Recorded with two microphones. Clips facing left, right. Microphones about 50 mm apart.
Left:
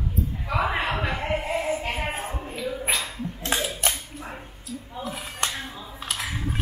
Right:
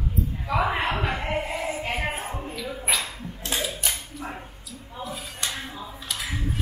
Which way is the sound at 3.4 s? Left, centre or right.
Left.